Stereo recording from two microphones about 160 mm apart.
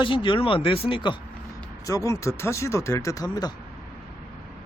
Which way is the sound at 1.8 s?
20° left (ahead or behind).